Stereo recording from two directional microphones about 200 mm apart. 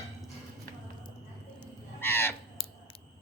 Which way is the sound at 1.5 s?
10° left (ahead or behind).